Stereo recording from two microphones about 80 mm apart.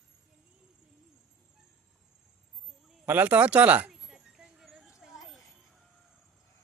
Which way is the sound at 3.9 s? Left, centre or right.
Centre.